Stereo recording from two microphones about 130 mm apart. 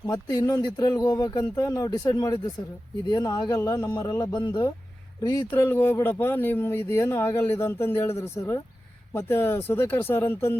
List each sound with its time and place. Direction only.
0.1 s speech: 30° left (ahead or behind)